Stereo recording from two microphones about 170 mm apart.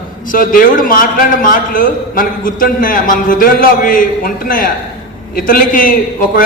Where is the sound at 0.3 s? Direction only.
55° left (ahead or behind).